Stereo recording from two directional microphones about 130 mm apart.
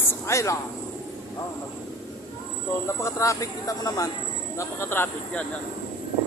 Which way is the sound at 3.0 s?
25° left (ahead or behind).